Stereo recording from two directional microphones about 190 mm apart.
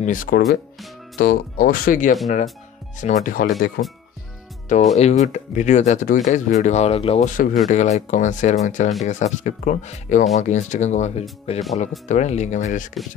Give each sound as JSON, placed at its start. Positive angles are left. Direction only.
{"t": 0.0, "sound": "speech", "side_deg": 45}
{"t": 4.9, "sound": "speech", "side_deg": 35}